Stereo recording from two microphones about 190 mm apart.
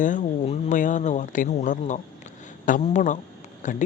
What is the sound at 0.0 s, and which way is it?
Speech, 40° left (ahead or behind).